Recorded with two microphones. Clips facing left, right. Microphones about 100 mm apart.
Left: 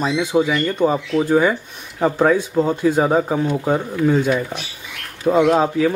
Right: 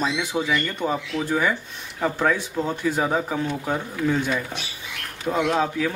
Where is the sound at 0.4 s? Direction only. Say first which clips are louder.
Left 8 dB; 20° left (ahead or behind).